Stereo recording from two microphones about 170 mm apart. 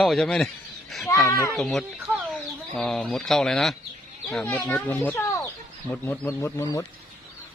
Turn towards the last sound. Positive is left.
turn(degrees=20)  # may be behind; listen again after turning